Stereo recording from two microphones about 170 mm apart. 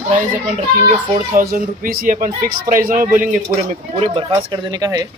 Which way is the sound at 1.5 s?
55° right (ahead or behind).